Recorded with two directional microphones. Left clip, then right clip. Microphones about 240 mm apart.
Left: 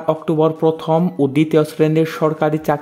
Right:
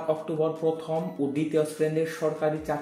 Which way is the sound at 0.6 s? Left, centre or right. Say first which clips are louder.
Left 11 dB; left.